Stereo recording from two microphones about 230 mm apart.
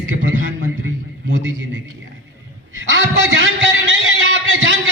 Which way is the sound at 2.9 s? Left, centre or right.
Right.